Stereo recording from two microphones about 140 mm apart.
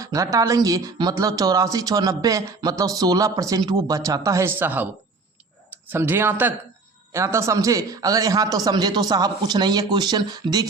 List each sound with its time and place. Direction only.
0.0 s speech: 25° right (ahead or behind)
5.9 s speech: 15° right (ahead or behind)